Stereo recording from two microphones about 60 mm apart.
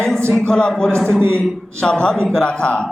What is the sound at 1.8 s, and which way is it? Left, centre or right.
A man's voice, centre.